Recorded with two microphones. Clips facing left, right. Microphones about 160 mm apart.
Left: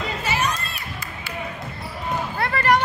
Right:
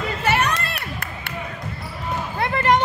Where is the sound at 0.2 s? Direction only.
60° right (ahead or behind).